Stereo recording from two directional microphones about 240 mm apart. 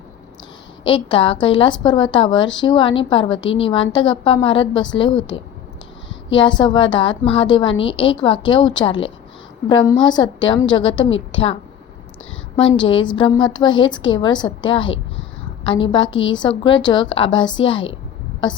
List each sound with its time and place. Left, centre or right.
0.9 s a woman's voice: centre
12.7 s a woman's voice: centre